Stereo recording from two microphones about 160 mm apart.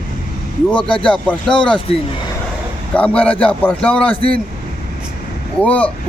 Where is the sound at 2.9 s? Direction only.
10° left (ahead or behind).